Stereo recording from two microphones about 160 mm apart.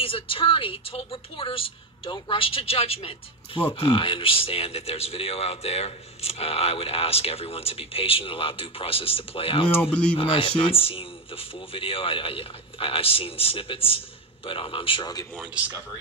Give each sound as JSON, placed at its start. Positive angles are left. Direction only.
{"t": 0.0, "sound": "a woman's voice", "side_deg": 35}
{"t": 15.3, "sound": "speech", "side_deg": -10}